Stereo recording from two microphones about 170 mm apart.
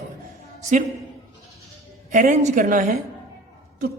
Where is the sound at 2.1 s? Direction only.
45° right (ahead or behind).